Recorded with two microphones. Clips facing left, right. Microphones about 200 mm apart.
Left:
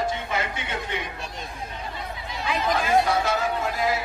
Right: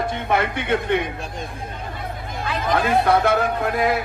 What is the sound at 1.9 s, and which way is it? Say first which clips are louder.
Chatter: right 3 dB; 50° right (ahead or behind).